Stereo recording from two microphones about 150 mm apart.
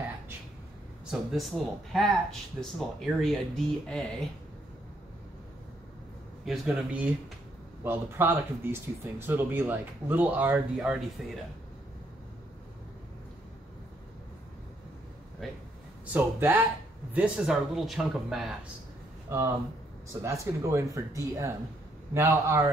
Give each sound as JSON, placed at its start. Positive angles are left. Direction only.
{"t": 1.3, "sound": "speech", "side_deg": 0}
{"t": 6.4, "sound": "speech", "side_deg": 0}
{"t": 15.4, "sound": "speech", "side_deg": 0}
{"t": 16.1, "sound": "speech", "side_deg": -15}
{"t": 19.2, "sound": "speech", "side_deg": -20}